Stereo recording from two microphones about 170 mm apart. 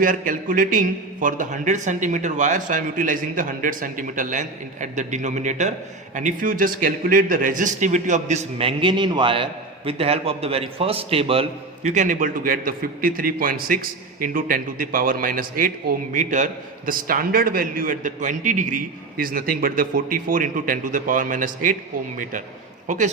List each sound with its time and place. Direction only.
0.0 s a man's voice: 55° right (ahead or behind)